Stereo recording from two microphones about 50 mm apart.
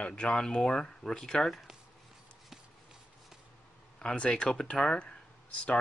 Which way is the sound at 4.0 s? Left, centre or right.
Centre.